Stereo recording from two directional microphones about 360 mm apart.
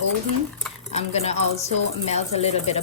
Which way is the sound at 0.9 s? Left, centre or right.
Centre.